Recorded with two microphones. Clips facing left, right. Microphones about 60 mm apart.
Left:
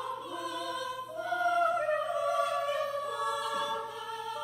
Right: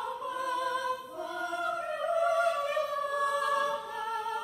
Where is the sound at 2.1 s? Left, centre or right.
Right.